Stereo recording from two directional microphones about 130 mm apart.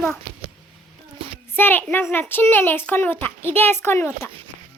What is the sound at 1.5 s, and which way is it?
A child's voice, 15° left (ahead or behind).